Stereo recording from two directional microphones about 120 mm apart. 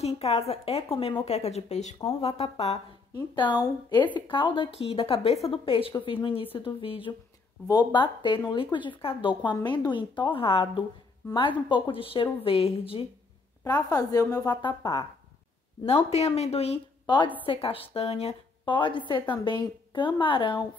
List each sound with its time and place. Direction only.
0.0 s a woman's voice: 60° left (ahead or behind); by 2.0 s 75° left (ahead or behind)
2.1 s a woman's voice: 55° left (ahead or behind)
3.2 s a woman's voice: 40° left (ahead or behind)
7.6 s a woman's voice: 35° left (ahead or behind); by 13.0 s 55° left (ahead or behind)
13.7 s a woman's voice: 35° left (ahead or behind)
15.8 s a woman's voice: 55° left (ahead or behind)
17.0 s a woman's voice: 40° left (ahead or behind)
17.5 s a woman's voice: 50° left (ahead or behind)
18.8 s a woman's voice: 40° left (ahead or behind)